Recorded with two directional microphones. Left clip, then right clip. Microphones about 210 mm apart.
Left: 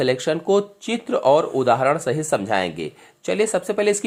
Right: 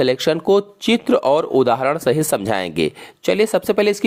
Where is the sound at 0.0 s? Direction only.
35° right (ahead or behind).